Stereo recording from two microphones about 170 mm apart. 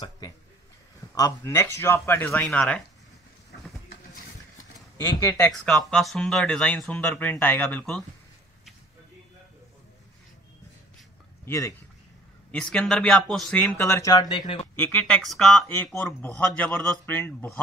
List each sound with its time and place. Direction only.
1.1 s speech: 20° left (ahead or behind)
3.5 s a sound: 70° left (ahead or behind)
4.9 s speech: 15° left (ahead or behind)
5.5 s speech: centre (ahead or behind)
11.4 s speech: 15° left (ahead or behind)
12.4 s speech: 5° left (ahead or behind); by 14.7 s 30° left (ahead or behind)
14.8 s speech: 10° left (ahead or behind)